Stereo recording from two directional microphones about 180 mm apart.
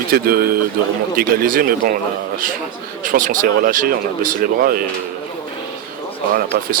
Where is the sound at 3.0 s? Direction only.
50° right (ahead or behind).